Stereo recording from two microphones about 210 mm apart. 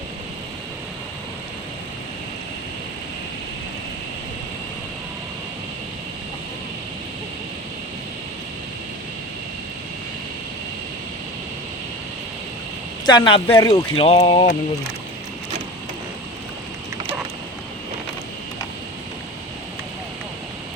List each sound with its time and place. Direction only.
13.1 s speech: 20° left (ahead or behind)